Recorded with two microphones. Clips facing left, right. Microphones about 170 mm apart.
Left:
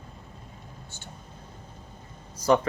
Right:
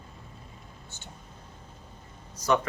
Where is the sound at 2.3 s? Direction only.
30° left (ahead or behind).